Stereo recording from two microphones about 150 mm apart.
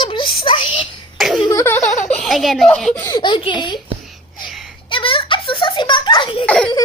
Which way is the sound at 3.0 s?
30° left (ahead or behind).